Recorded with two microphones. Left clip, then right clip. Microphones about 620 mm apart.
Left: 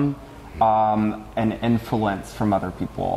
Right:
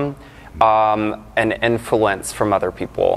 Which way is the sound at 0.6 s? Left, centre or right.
Right.